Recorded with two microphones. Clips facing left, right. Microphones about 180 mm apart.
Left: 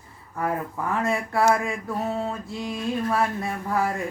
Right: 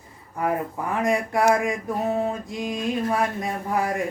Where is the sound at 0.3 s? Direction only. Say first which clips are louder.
Right 2 dB; 20° right (ahead or behind).